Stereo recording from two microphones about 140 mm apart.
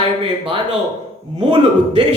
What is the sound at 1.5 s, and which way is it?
Speech, 35° right (ahead or behind).